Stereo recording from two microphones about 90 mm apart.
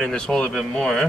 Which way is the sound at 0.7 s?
5° left (ahead or behind).